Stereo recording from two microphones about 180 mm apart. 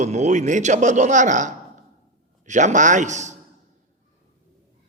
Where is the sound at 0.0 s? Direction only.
40° right (ahead or behind).